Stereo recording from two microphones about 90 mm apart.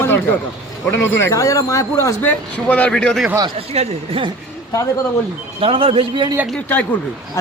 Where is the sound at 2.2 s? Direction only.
20° left (ahead or behind).